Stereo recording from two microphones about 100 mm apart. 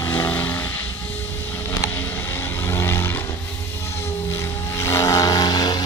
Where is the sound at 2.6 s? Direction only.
25° left (ahead or behind).